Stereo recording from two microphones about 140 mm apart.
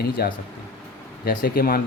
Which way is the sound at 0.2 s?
90° left.